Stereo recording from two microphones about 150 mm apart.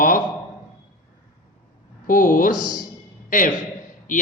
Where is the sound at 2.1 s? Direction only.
65° left (ahead or behind).